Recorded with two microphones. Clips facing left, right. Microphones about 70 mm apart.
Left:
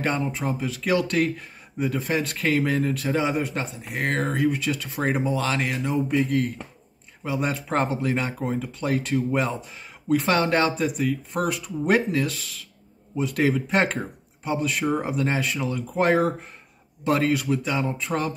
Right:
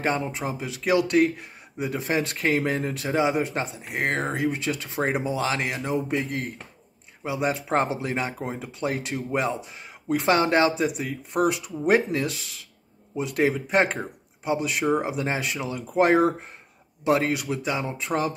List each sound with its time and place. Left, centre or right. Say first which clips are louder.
0.0 s speech: even; right
1.9 s speech: even; right
7.2 s speech: right 1 dB; centre
9.7 s a sound: left 2 dB; centre
10.1 s speech: even; right
13.1 s speech: left 1 dB; centre